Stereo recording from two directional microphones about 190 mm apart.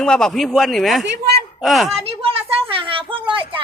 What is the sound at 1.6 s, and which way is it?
Speech, centre (ahead or behind).